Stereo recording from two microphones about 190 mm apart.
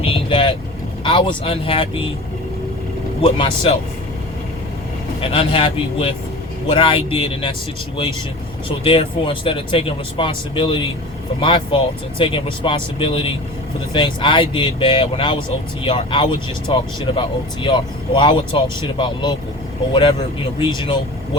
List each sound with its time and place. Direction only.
0.0 s vehicle: 30° left (ahead or behind)
1.0 s speech: 25° left (ahead or behind)
3.2 s speech: 25° left (ahead or behind)
5.2 s speech: 30° left (ahead or behind)
8.8 s speech: 30° left (ahead or behind)